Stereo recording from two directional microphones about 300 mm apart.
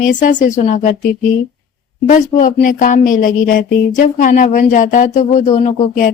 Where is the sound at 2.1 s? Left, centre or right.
Left.